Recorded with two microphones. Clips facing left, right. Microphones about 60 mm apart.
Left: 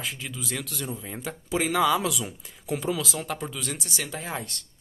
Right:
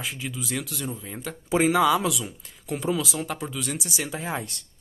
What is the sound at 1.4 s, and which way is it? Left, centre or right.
Speech, right.